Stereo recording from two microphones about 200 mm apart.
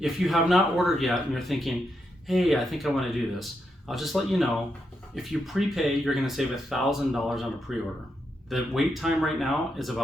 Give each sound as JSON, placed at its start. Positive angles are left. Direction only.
{"t": 0.0, "sound": "speech", "side_deg": 0}